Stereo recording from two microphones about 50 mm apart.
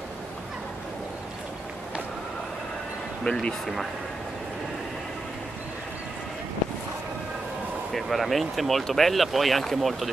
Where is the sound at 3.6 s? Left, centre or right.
Centre.